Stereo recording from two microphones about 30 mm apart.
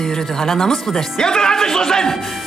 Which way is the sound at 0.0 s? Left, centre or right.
Centre.